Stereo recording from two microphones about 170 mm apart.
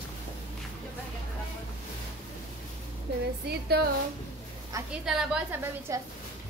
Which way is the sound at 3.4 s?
70° right (ahead or behind).